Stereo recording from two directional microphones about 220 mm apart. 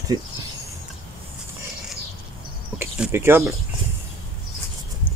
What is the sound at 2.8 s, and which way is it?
Speech, 10° right (ahead or behind).